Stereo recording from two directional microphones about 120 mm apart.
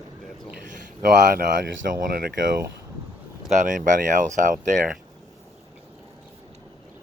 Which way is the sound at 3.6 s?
90° right.